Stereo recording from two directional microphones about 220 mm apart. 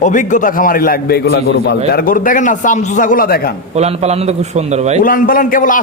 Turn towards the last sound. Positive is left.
turn(degrees=40)  # may be behind; listen again after turning